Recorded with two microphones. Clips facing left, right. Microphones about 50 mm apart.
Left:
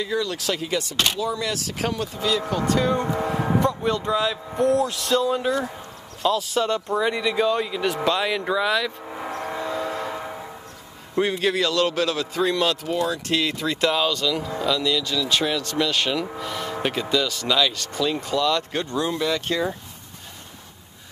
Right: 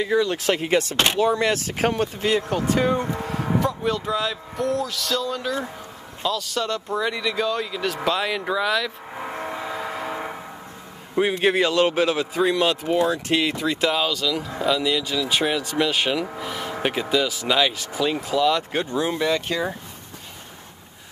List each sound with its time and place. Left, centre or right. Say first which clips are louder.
0.0 s speech: right 4 dB; right
2.7 s speech: right 1 dB; centre
3.0 s speech: left 3 dB; centre
5.1 s speech: left 5 dB; left
6.2 s speech: left 3 dB; centre
11.3 s a man's voice: right 5 dB; right
12.9 s speech: right 3 dB; right; by 14.6 s centre
14.6 s speech: right 2 dB; centre